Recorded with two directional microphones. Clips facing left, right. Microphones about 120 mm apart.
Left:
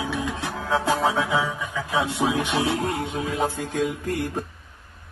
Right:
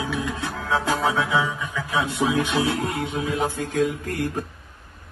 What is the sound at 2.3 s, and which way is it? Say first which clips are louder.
Speech: right 2 dB; 15° left (ahead or behind).